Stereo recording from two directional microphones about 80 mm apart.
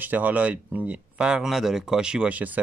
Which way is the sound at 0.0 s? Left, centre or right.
Right.